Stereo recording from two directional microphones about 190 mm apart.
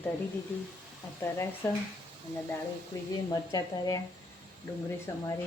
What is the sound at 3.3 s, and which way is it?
Speech, 20° left (ahead or behind).